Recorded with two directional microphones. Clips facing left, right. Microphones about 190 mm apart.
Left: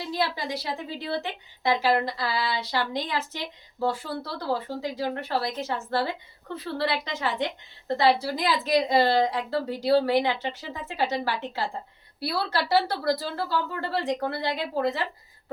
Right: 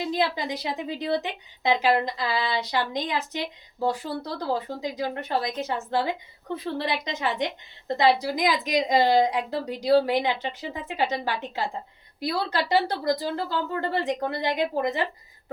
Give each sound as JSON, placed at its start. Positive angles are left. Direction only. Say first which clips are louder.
{"t": 0.0, "sound": "a woman's voice", "louder": "right 3 dB", "side_deg": -15}